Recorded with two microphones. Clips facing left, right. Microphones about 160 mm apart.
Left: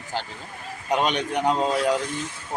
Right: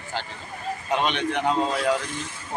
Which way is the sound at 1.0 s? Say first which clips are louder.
Even; 40° left (ahead or behind).